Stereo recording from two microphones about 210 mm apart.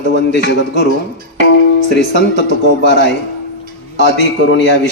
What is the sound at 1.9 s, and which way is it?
A man's voice, 55° left (ahead or behind).